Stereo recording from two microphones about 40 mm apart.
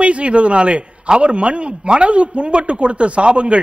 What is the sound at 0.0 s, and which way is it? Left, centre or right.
A man's voice, right.